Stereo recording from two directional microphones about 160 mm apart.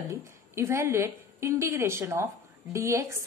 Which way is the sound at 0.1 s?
15° right (ahead or behind).